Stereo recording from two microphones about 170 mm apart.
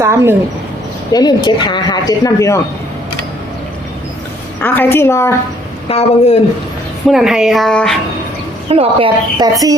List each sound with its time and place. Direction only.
0.0 s speech: 15° right (ahead or behind)
1.1 s speech: 25° left (ahead or behind)
4.6 s a woman's voice: 10° left (ahead or behind)
5.9 s speech: 40° left (ahead or behind)
7.1 s speech: centre (ahead or behind)
8.7 s a woman's voice: 35° right (ahead or behind)